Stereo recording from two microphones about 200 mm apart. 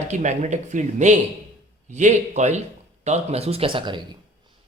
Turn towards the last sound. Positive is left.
turn(degrees=-25)  # may be behind; listen again after turning